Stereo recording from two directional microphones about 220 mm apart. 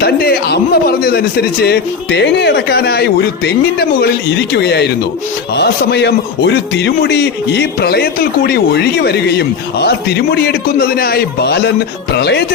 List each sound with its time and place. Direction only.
0.0 s a man's voice: 45° left (ahead or behind)